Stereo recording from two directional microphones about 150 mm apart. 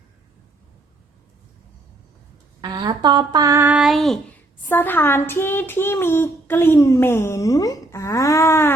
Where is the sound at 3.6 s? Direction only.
5° right (ahead or behind).